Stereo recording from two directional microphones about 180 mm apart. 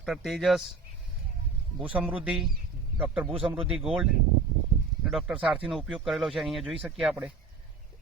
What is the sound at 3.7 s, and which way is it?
Speech, 5° right (ahead or behind).